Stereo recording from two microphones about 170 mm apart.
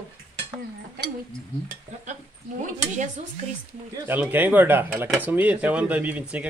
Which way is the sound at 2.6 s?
45° right (ahead or behind).